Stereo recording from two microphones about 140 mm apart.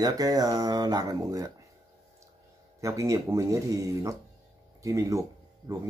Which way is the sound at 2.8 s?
20° right (ahead or behind).